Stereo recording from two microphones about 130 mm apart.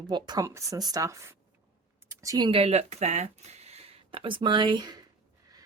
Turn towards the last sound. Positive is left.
turn(degrees=-35)  # may be behind; listen again after turning